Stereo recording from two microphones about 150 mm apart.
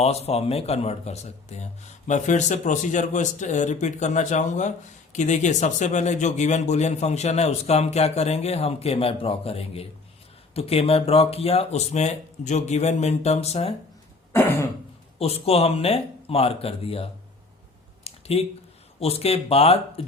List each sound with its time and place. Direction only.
0.0 s speech: 45° left (ahead or behind)
14.3 s throat clearing: 15° left (ahead or behind)
15.2 s speech: 40° left (ahead or behind)
18.0 s a sound: 40° left (ahead or behind)
18.9 s speech: 40° left (ahead or behind)